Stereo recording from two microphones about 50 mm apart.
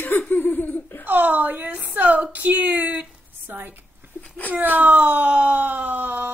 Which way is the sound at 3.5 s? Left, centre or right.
Right.